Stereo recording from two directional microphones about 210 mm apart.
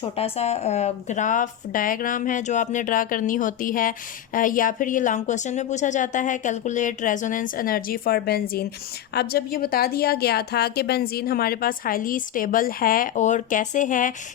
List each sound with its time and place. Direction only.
0.0 s a woman's voice: 30° left (ahead or behind)